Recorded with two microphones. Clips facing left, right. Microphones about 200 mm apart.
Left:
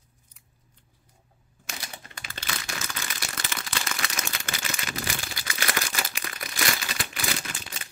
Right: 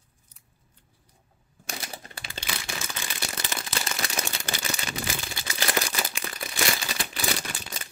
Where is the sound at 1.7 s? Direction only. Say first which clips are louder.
Right 3 dB; 35° right (ahead or behind).